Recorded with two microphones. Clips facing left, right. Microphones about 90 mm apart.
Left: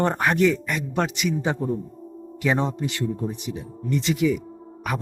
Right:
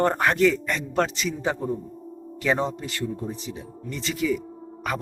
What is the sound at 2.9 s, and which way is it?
Speech, 20° left (ahead or behind).